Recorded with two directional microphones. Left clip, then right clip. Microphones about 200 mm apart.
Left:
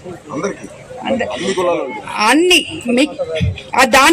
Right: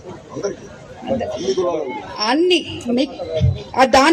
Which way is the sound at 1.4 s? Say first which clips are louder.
Left 3 dB; 35° left (ahead or behind).